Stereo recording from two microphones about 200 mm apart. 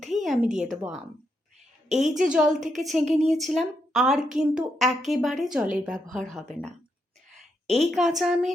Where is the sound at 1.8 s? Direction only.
35° right (ahead or behind).